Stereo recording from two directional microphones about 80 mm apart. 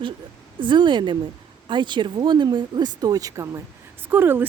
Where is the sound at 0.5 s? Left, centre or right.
Right.